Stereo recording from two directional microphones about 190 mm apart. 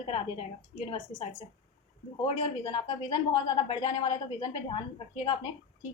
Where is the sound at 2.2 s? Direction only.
25° left (ahead or behind).